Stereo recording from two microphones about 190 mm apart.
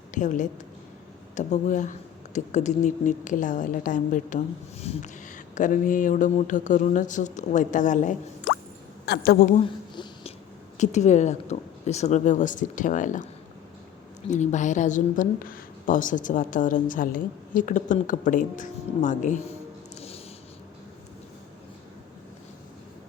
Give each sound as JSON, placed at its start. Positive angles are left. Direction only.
{"t": 0.1, "sound": "a woman's voice", "side_deg": 40}
{"t": 9.0, "sound": "a woman's voice", "side_deg": 55}
{"t": 9.6, "sound": "a sound", "side_deg": 30}
{"t": 10.8, "sound": "speech", "side_deg": 40}
{"t": 14.3, "sound": "a woman's voice", "side_deg": 40}
{"t": 20.0, "sound": "a sound", "side_deg": 30}